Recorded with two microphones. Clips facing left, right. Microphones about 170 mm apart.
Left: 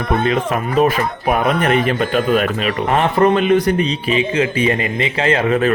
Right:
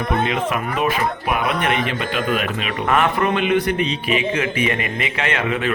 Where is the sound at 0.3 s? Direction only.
40° left (ahead or behind).